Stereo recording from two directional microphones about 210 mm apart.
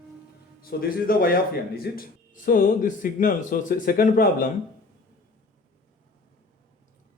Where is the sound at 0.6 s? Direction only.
45° left (ahead or behind).